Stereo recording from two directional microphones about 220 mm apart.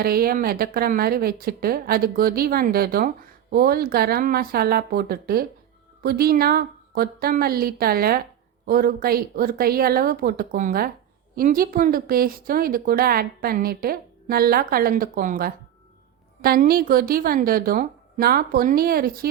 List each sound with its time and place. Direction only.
0.0 s a woman's voice: 45° right (ahead or behind)